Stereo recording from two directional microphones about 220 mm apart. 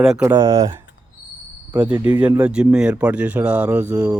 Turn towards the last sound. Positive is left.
turn(degrees=-15)  # may be behind; listen again after turning